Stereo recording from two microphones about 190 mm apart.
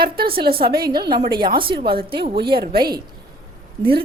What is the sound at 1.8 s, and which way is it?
Speech, 55° right (ahead or behind).